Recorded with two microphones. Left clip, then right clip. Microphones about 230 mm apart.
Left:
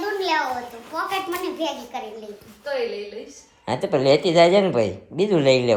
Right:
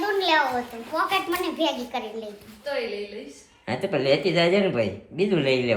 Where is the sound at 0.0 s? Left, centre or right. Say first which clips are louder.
Right 1 dB; centre.